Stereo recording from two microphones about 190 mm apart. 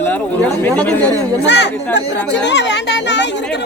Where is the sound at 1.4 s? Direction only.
65° left (ahead or behind).